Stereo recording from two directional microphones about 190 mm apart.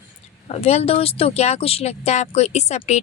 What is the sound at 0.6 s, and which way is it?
Speech, 35° left (ahead or behind).